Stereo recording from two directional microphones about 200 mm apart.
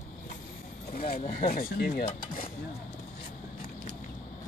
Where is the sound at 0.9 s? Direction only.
50° left (ahead or behind).